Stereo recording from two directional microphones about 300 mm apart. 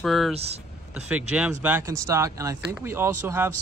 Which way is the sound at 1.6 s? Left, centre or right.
Centre.